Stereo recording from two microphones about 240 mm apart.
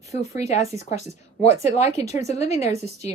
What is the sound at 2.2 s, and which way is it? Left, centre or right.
Speech, left.